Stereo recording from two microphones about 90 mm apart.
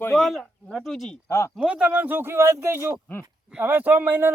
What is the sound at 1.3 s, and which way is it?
Speech, 30° left (ahead or behind).